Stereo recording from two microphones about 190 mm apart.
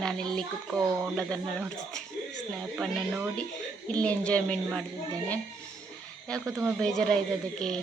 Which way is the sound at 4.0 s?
5° left (ahead or behind).